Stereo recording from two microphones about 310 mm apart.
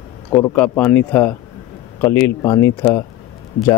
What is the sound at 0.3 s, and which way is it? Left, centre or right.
A man's voice, centre.